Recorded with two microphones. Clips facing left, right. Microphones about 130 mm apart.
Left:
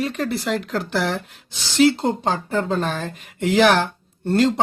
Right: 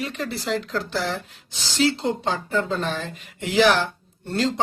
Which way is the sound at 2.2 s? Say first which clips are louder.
Left 2 dB; 40° left (ahead or behind).